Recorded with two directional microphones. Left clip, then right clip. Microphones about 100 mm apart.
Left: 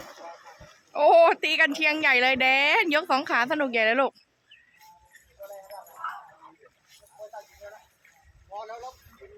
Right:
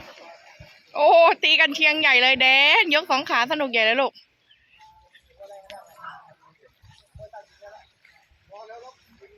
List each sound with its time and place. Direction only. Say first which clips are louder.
0.9 s speech: right 2 dB; 20° left (ahead or behind)
5.4 s clip-clop: left 1 dB; 35° left (ahead or behind)
9.2 s tick-tock: left 2 dB; centre (ahead or behind)